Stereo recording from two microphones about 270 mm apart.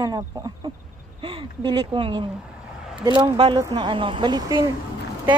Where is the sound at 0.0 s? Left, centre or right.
Centre.